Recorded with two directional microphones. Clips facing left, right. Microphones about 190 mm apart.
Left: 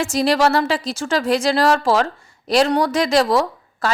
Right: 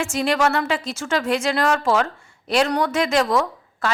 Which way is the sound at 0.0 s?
35° left (ahead or behind).